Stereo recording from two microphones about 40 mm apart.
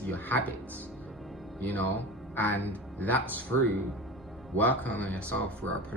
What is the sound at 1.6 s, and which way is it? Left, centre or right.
Speech, left.